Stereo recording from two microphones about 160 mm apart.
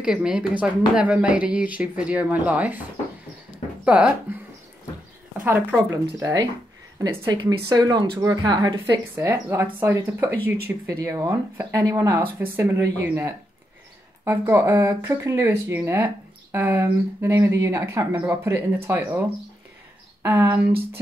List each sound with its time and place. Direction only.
0.0 s speech: 5° right (ahead or behind)
3.8 s speech: 10° right (ahead or behind)
5.4 s speech: 10° right (ahead or behind)
6.1 s speech: 20° right (ahead or behind)